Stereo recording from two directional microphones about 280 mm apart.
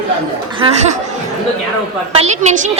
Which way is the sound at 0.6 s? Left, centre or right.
Centre.